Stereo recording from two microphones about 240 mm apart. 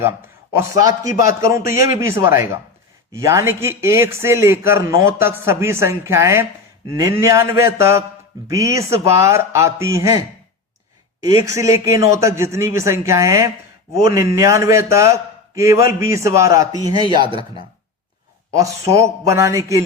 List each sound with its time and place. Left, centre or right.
0.7 s speech: left
1.2 s a man's voice: centre
18.5 s a man's voice: centre